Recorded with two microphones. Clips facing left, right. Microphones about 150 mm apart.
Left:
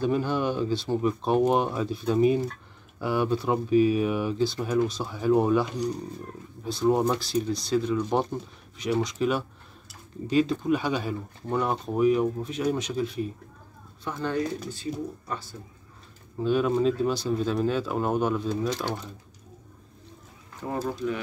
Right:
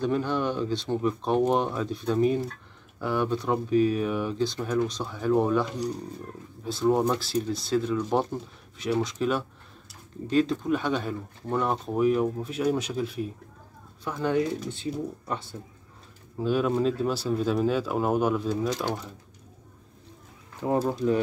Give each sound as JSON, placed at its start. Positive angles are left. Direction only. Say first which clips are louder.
{"t": 0.0, "sound": "speech", "louder": "left 1 dB", "side_deg": 10}
{"t": 14.7, "sound": "speech", "louder": "right 1 dB", "side_deg": -25}
{"t": 16.3, "sound": "speech", "louder": "left 1 dB", "side_deg": -5}
{"t": 20.6, "sound": "speech", "louder": "right 5 dB", "side_deg": -25}